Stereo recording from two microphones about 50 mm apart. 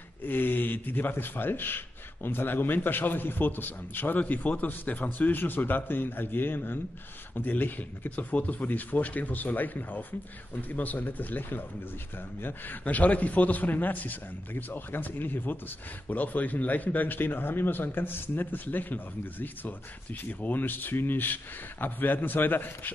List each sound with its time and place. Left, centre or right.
0.2 s a man's voice: left
12.8 s speech: left